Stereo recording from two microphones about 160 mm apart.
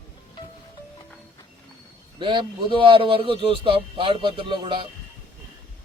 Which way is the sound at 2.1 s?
30° right (ahead or behind).